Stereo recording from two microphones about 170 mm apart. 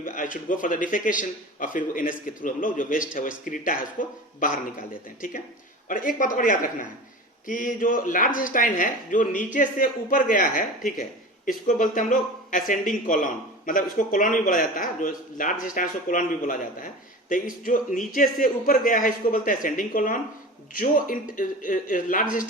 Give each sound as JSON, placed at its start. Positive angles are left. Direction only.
{"t": 0.0, "sound": "speech", "side_deg": 55}